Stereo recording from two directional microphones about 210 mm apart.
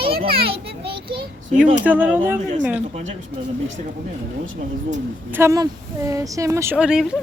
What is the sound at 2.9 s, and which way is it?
Speech, 35° right (ahead or behind).